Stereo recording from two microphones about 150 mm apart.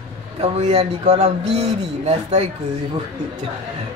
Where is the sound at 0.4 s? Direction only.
45° right (ahead or behind).